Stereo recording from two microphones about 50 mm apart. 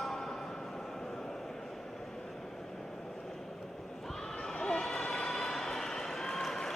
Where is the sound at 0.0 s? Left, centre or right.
Centre.